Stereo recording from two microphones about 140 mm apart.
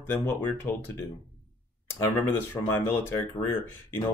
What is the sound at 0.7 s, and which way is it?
Speech, 15° left (ahead or behind).